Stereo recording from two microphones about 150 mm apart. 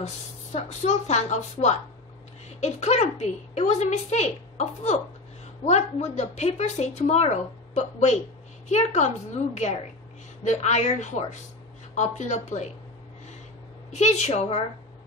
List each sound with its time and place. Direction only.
0.0 s a woman's voice: 50° left (ahead or behind)
13.9 s a woman's voice: 50° left (ahead or behind)